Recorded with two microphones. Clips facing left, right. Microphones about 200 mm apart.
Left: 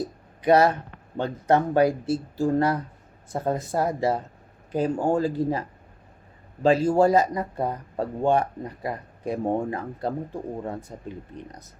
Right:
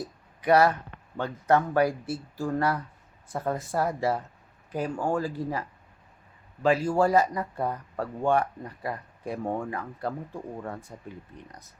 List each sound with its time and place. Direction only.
0.4 s speech: 20° left (ahead or behind)